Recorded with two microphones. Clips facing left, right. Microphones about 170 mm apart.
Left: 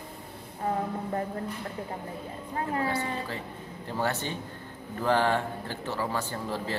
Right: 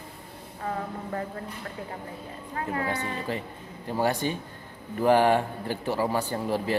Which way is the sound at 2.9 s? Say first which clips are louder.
Right 1 dB; 20° right (ahead or behind).